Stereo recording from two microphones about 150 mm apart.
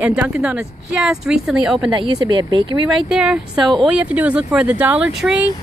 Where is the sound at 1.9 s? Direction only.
35° right (ahead or behind).